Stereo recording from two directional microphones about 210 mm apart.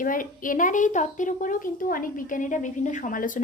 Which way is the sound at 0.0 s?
40° left (ahead or behind).